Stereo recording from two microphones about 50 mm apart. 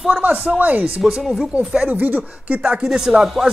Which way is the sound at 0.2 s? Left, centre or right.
Right.